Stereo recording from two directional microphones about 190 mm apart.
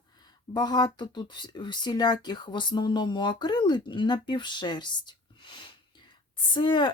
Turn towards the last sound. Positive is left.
turn(degrees=25)  # may be behind; listen again after turning